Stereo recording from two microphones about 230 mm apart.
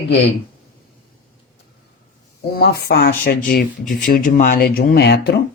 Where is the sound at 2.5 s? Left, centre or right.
Left.